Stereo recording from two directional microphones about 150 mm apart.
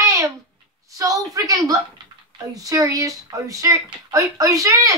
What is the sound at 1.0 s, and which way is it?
Speech, 25° right (ahead or behind).